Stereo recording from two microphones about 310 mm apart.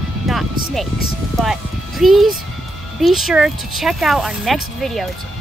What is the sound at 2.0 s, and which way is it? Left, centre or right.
Speech, centre.